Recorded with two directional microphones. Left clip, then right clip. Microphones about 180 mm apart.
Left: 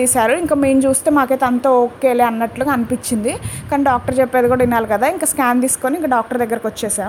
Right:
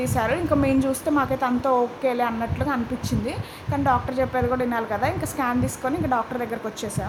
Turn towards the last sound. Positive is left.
turn(degrees=35)  # may be behind; listen again after turning